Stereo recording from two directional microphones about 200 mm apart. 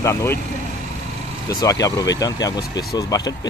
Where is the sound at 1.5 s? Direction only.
15° left (ahead or behind).